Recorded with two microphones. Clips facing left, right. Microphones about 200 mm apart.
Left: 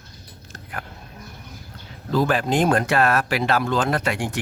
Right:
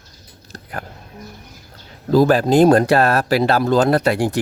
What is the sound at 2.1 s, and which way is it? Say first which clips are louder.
Speech: right 7 dB; 40° right (ahead or behind).